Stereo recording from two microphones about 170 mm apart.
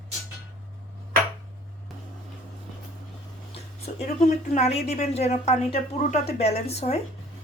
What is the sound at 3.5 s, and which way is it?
Speech, 40° left (ahead or behind).